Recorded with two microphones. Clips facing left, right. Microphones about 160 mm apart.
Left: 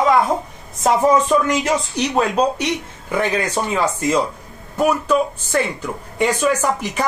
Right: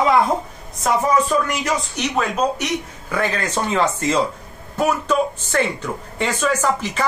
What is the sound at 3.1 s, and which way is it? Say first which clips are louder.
Speech: left 2 dB; 15° left (ahead or behind).